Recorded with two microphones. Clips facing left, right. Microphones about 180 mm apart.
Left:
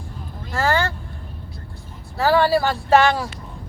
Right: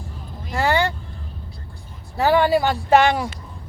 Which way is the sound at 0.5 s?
15° right (ahead or behind).